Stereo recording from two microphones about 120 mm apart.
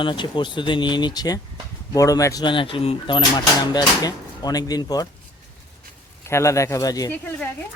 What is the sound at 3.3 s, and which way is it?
Speech, 35° left (ahead or behind).